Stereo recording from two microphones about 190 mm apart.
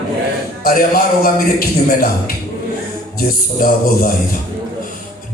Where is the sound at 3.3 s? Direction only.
50° left (ahead or behind).